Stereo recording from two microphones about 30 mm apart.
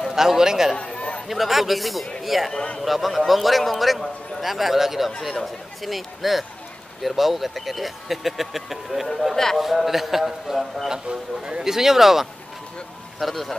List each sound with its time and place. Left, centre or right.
0.1 s a man's voice: centre
0.9 s a sound: left
1.2 s a man's voice: centre
9.6 s a man's voice: centre
11.1 s speech: right
11.6 s a man's voice: centre